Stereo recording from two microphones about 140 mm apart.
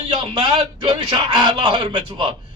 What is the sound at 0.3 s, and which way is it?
Speech, 35° right (ahead or behind).